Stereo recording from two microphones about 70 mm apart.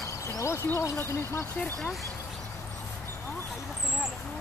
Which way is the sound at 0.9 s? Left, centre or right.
Left.